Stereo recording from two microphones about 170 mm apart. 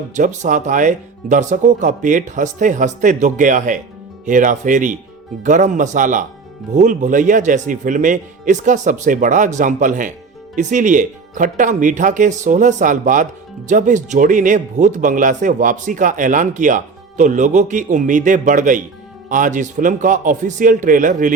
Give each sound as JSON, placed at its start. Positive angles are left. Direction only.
{"t": 0.1, "sound": "speech", "side_deg": -45}